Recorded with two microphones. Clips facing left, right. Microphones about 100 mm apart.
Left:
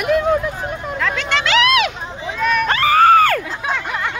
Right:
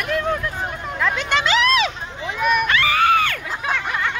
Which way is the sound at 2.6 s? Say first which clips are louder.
Left 5 dB; 35° left (ahead or behind).